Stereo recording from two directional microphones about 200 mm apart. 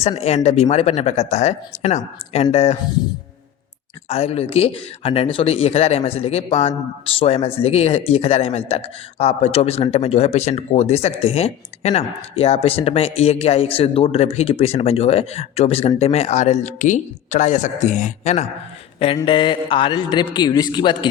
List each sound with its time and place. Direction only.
0.0 s a man's voice: 30° left (ahead or behind)
4.1 s a man's voice: 30° left (ahead or behind)